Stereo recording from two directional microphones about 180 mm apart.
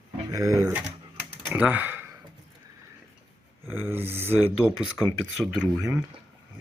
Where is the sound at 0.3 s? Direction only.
20° right (ahead or behind).